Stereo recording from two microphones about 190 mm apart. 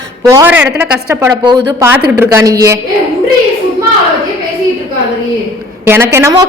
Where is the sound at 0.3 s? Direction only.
15° right (ahead or behind).